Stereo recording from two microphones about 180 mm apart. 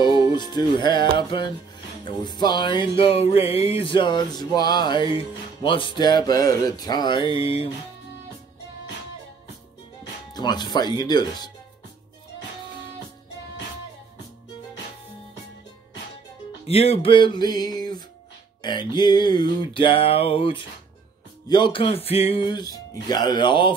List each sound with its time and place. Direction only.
0.3 s music: 25° left (ahead or behind)
10.3 s music: 25° left (ahead or behind)
16.6 s music: 35° left (ahead or behind)